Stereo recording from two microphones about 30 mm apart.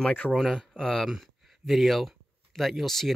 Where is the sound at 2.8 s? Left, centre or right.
Centre.